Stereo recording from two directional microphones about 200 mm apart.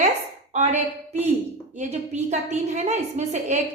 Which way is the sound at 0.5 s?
35° right (ahead or behind).